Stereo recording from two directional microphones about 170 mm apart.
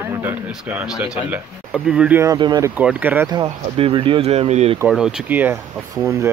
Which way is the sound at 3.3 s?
30° right (ahead or behind).